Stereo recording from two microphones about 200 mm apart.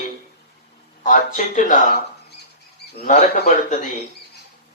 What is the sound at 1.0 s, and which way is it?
Speech, 40° left (ahead or behind).